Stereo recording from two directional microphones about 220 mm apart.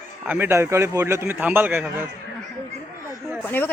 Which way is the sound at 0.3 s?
10° right (ahead or behind).